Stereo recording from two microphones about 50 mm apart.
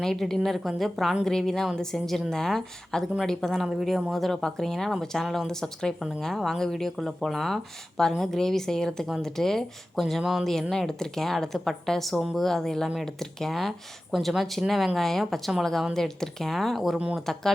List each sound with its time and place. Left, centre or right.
0.0 s a woman's voice: centre
3.7 s a woman's voice: centre
10.5 s a woman's voice: centre